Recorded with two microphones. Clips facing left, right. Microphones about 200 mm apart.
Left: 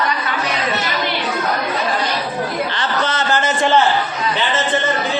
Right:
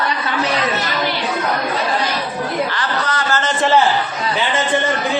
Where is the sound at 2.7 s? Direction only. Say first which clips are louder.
Left 1 dB; 25° left (ahead or behind).